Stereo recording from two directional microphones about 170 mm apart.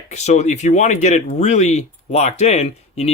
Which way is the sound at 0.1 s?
40° left (ahead or behind).